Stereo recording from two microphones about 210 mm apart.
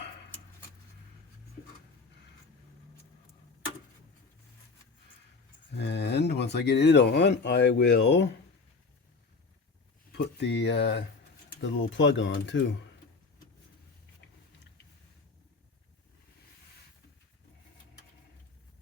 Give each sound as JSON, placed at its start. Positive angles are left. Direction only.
{"t": 5.7, "sound": "a sound", "side_deg": 55}
{"t": 6.8, "sound": "speech", "side_deg": 55}
{"t": 10.4, "sound": "speech", "side_deg": 55}